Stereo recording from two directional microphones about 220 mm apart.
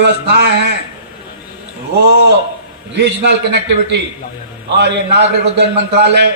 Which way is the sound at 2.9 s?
50° right (ahead or behind).